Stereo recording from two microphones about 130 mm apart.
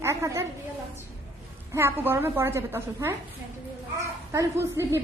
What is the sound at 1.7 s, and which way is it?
A woman's voice, 20° right (ahead or behind).